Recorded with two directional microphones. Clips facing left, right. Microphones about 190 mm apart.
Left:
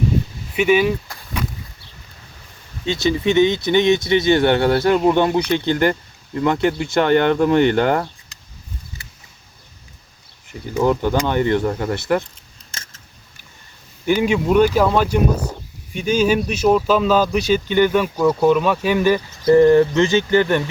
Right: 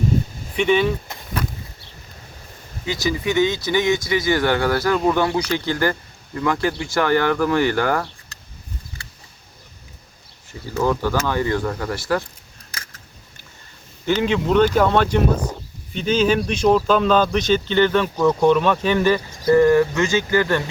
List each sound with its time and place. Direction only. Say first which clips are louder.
0.5 s speech: left 2 dB; 5° left (ahead or behind)
2.8 s speech: left 4 dB; 25° left (ahead or behind)
10.5 s speech: left 3 dB; 20° left (ahead or behind)
12.7 s a sound: right 1 dB; 25° left (ahead or behind)
14.0 s speech: left 2 dB; 10° left (ahead or behind)
19.5 s speech: left 3 dB; 25° left (ahead or behind)